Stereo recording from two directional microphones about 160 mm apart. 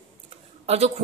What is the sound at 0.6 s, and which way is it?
Speech, 40° right (ahead or behind).